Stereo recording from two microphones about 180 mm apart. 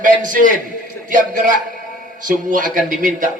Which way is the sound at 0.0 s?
45° right (ahead or behind).